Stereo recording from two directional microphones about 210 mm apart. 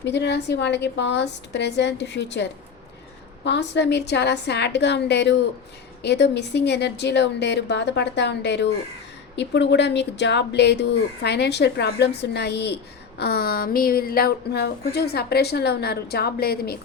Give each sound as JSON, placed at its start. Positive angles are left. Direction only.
{"t": 0.0, "sound": "a woman's voice", "side_deg": 55}